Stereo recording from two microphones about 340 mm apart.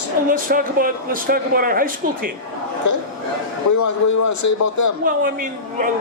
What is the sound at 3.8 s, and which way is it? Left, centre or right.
A man's voice, left.